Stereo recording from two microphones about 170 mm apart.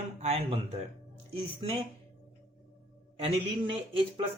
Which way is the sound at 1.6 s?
30° right (ahead or behind).